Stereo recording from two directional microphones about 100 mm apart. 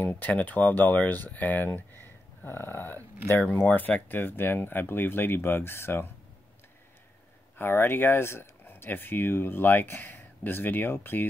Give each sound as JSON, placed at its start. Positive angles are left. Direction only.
{"t": 0.0, "sound": "speech", "side_deg": 20}
{"t": 7.5, "sound": "speech", "side_deg": 20}